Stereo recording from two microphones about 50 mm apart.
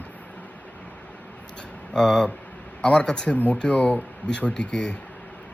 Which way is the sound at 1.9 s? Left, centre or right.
Centre.